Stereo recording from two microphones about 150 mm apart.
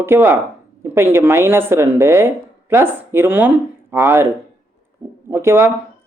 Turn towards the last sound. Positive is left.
turn(degrees=-15)  # may be behind; listen again after turning